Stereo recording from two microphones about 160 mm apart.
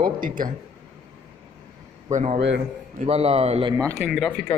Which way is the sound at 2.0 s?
45° right (ahead or behind).